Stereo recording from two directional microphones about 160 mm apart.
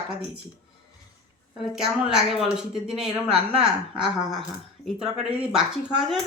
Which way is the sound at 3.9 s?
5° right (ahead or behind).